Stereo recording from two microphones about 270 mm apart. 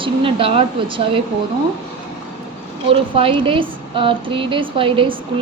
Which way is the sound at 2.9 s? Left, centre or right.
Centre.